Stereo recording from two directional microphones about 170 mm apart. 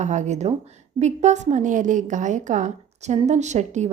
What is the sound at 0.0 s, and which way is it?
A woman's voice, 45° right (ahead or behind).